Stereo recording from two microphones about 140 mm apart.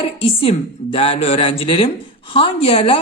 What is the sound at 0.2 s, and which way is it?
A woman's voice, 45° left (ahead or behind).